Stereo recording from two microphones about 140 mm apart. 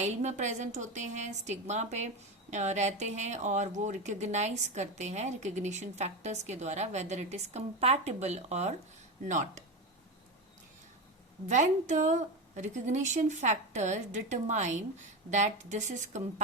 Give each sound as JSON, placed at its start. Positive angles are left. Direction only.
{"t": 0.0, "sound": "speech", "side_deg": -55}
{"t": 9.2, "sound": "speech", "side_deg": -65}
{"t": 11.4, "sound": "speech", "side_deg": -60}